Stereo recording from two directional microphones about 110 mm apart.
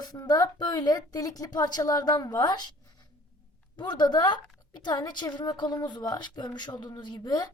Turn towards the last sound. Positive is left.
turn(degrees=40)  # may be behind; listen again after turning